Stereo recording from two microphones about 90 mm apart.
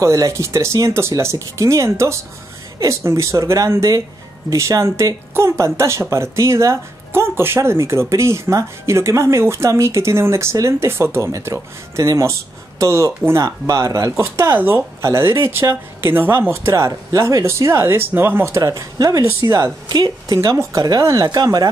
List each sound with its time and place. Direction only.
0.0 s speech: 35° right (ahead or behind)
14.2 s speech: 25° right (ahead or behind)
18.6 s a woman's voice: 40° right (ahead or behind)
20.3 s speech: 35° right (ahead or behind)